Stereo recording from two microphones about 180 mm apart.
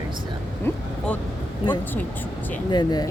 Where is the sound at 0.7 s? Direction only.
10° left (ahead or behind).